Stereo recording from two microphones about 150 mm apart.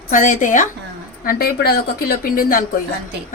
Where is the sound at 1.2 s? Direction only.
80° left.